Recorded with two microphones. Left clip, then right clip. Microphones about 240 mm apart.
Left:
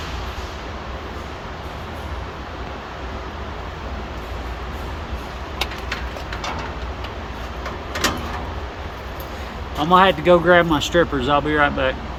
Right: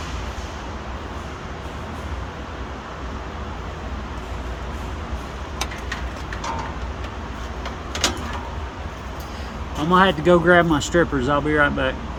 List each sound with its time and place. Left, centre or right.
9.9 s speech: right